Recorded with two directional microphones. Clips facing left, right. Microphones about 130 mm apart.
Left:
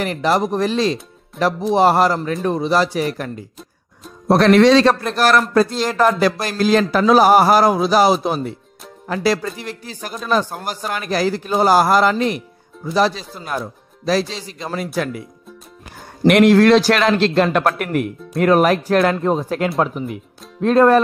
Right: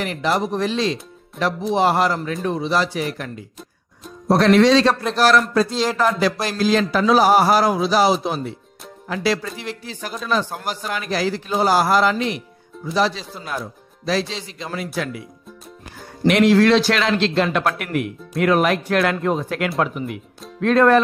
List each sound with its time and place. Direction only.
0.0 s speech: 45° left (ahead or behind)
4.3 s speech: 65° left (ahead or behind)
5.7 s speech: 5° left (ahead or behind)
5.9 s speech: 50° left (ahead or behind)
16.3 s speech: 55° left (ahead or behind); by 21.0 s 35° left (ahead or behind)